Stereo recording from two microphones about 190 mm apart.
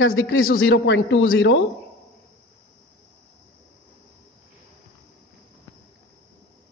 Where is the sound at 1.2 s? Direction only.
60° left (ahead or behind).